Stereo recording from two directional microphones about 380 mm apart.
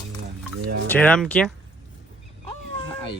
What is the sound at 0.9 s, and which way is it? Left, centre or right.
Speech, centre.